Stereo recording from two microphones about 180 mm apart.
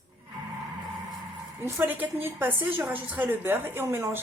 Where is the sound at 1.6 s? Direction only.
10° right (ahead or behind).